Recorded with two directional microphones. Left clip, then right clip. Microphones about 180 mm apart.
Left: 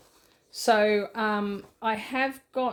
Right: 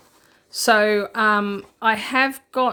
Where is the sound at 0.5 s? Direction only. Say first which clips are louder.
Right 5 dB; 25° right (ahead or behind).